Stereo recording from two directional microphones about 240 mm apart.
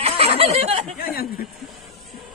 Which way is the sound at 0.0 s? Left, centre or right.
Right.